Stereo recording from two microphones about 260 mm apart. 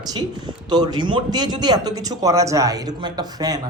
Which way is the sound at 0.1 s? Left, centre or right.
Centre.